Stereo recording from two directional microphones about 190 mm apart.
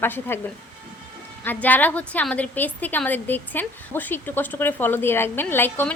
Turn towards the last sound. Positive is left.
turn(degrees=10)  # may be behind; listen again after turning